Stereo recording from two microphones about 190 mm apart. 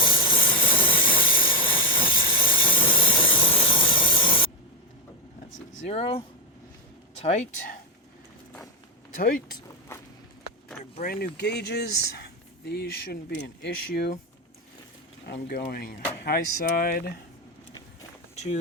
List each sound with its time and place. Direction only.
0.1 s steam: 25° left (ahead or behind)
5.7 s speech: 35° left (ahead or behind)
9.1 s speech: 50° left (ahead or behind)
9.9 s walk: 15° left (ahead or behind)
11.0 s speech: 55° left (ahead or behind)
15.3 s speech: 50° left (ahead or behind)